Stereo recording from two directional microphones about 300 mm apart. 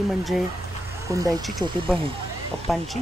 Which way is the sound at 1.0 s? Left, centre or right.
Centre.